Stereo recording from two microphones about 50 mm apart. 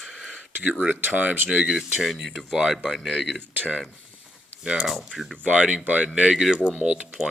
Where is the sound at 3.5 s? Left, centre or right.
Right.